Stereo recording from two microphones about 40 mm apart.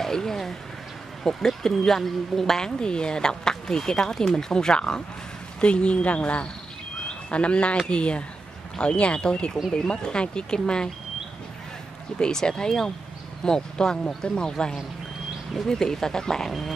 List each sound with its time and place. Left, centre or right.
0.0 s speech: centre
2.8 s speech: left
12.2 s speech: centre
16.4 s a sound: centre